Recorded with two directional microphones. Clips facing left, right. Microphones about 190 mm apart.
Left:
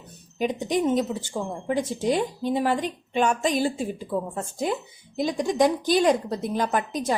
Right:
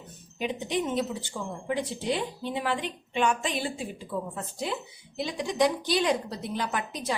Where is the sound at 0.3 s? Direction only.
45° left (ahead or behind).